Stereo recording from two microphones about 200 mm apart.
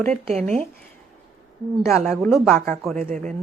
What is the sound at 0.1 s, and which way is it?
Speech, 35° right (ahead or behind).